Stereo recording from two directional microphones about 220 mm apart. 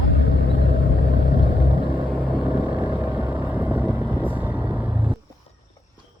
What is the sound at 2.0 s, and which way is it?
Vehicle, 20° right (ahead or behind).